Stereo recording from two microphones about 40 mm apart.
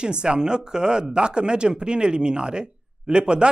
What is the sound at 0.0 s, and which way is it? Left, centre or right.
Speech, right.